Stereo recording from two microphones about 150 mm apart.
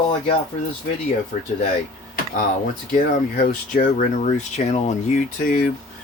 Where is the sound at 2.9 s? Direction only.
65° left (ahead or behind); by 5.0 s 50° left (ahead or behind).